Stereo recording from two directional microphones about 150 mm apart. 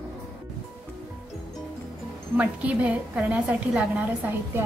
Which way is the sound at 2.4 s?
10° right (ahead or behind).